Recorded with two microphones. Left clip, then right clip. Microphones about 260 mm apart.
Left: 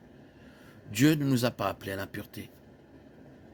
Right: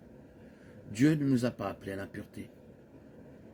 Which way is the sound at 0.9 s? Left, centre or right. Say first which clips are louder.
Left 2 dB; left.